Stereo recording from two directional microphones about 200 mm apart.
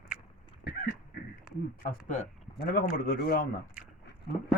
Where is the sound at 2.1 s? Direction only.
45° left (ahead or behind).